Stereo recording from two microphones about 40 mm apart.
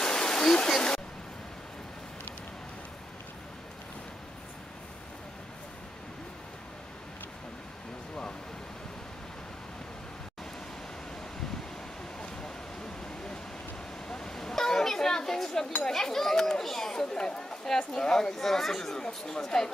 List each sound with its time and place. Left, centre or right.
0.0 s waterfall: centre
14.0 s a sound: centre
15.9 s chatter: centre
17.1 s speech: centre